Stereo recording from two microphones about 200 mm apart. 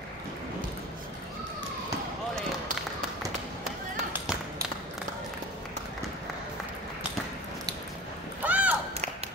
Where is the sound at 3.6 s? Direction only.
10° right (ahead or behind).